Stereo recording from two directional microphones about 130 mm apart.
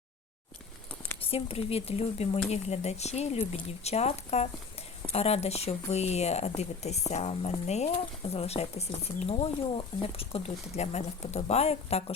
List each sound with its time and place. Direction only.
1.2 s speech: 45° left (ahead or behind)